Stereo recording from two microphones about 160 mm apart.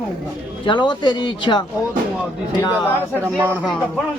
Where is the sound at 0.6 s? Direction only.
30° left (ahead or behind).